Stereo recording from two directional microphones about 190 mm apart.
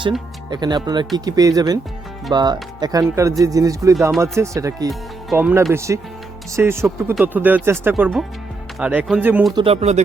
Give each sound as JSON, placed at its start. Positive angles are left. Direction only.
{"t": 0.5, "sound": "speech", "side_deg": -20}
{"t": 9.6, "sound": "speech", "side_deg": -30}